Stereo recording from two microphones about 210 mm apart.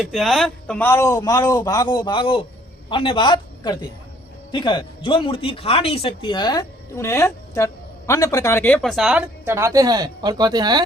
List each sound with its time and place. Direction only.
0.0 s a man's voice: centre (ahead or behind); by 10.8 s 20° right (ahead or behind)